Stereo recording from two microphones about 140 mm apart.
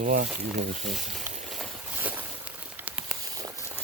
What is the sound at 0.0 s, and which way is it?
Speech, 75° right (ahead or behind).